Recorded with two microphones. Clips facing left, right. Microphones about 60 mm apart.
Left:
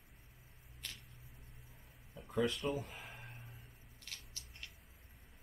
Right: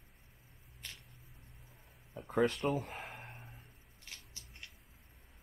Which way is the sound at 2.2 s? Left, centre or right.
Right.